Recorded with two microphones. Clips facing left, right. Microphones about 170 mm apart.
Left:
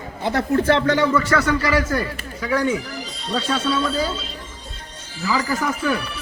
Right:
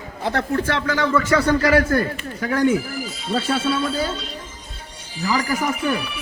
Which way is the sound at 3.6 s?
5° right (ahead or behind).